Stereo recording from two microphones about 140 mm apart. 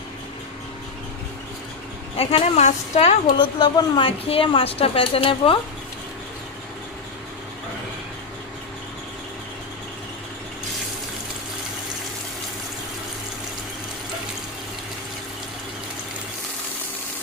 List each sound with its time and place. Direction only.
2.1 s a woman's voice: 45° left (ahead or behind)
3.2 s speech: 35° left (ahead or behind)